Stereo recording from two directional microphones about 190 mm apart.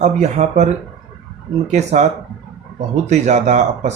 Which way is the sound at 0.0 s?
40° right (ahead or behind).